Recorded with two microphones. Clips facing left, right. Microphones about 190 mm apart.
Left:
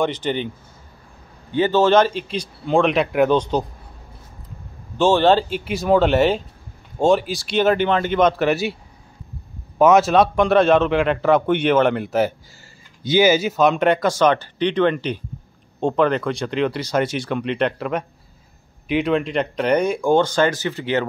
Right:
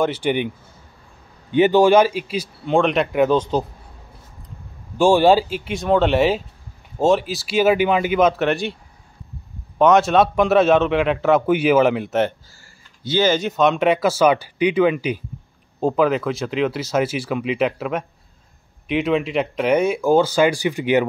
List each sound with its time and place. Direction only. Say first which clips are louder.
0.0 s a man's voice: right 2 dB; 10° right (ahead or behind)
1.5 s a man's voice: right 2 dB; 15° right (ahead or behind)
4.9 s a man's voice: right 1 dB; 10° right (ahead or behind)
9.8 s a man's voice: left 1 dB; centre (ahead or behind)
13.0 s a man's voice: left 3 dB; 10° left (ahead or behind); by 21.1 s 15° right (ahead or behind)